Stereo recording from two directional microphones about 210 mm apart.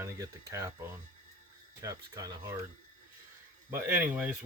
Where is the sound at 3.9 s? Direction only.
10° right (ahead or behind).